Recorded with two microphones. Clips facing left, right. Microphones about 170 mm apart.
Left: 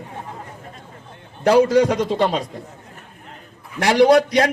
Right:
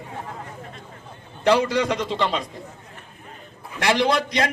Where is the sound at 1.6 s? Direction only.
45° left (ahead or behind).